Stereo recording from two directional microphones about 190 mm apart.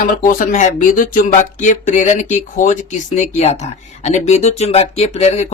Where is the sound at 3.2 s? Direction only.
35° left (ahead or behind).